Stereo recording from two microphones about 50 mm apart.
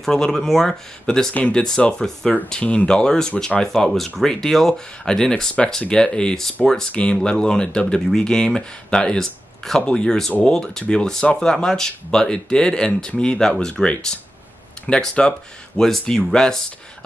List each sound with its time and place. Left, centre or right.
0.0 s speech: centre
2.6 s speech: left
2.9 s speech: centre
6.9 s speech: left